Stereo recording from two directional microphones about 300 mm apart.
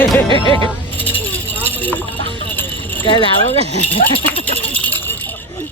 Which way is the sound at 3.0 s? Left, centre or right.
Centre.